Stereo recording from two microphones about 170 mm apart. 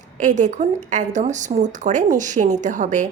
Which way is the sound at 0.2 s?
45° right (ahead or behind).